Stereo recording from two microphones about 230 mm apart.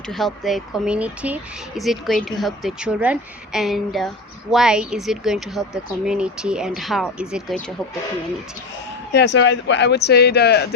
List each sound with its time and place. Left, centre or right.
0.1 s speech: centre
9.1 s speech: left